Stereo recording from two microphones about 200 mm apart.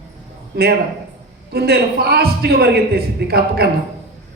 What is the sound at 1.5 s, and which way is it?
A man's voice, 55° right (ahead or behind).